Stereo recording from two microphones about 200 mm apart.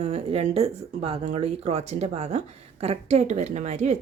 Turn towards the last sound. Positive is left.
turn(degrees=-35)  # may be behind; listen again after turning